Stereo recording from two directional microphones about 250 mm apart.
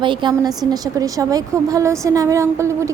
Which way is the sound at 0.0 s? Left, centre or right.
Centre.